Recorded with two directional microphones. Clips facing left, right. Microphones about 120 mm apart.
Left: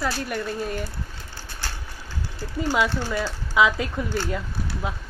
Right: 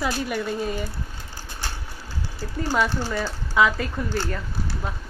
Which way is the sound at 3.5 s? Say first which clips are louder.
Even; 10° left (ahead or behind).